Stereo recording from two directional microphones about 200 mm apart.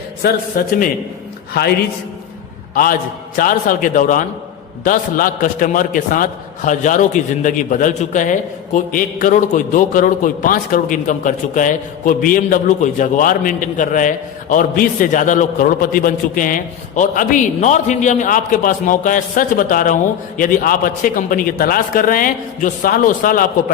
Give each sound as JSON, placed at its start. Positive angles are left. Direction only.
{"t": 0.2, "sound": "a man's voice", "side_deg": 50}
{"t": 2.7, "sound": "a man's voice", "side_deg": 45}